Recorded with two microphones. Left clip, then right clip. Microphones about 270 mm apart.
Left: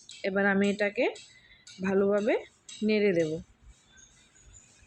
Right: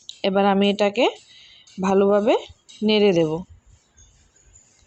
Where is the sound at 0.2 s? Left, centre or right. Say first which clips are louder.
Right 8 dB; right.